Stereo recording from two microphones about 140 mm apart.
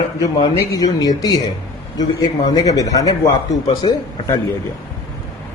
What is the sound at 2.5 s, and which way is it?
A man's voice, 25° left (ahead or behind).